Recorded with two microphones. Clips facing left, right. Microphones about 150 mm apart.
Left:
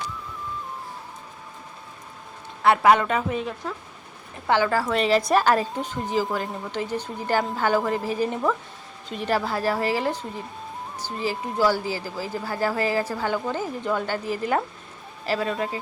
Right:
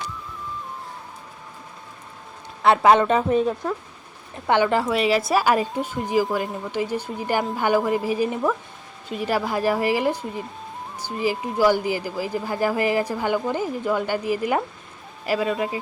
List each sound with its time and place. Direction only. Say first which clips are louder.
2.6 s a woman's voice: right 2 dB; 25° right (ahead or behind)
4.4 s a woman's voice: right 2 dB; 20° right (ahead or behind)
4.9 s speech: even; 10° right (ahead or behind)